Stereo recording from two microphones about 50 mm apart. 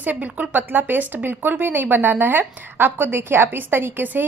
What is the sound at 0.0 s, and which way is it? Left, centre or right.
A woman's voice, right.